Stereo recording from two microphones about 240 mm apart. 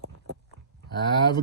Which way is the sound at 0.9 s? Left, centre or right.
Centre.